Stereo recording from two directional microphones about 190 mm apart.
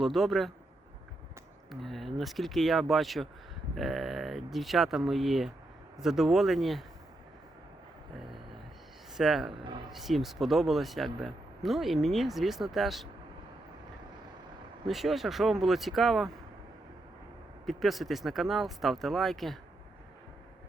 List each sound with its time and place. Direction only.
0.0 s speech: centre (ahead or behind)
1.7 s speech: centre (ahead or behind)
9.1 s speech: centre (ahead or behind)
14.8 s speech: centre (ahead or behind)
17.7 s speech: centre (ahead or behind)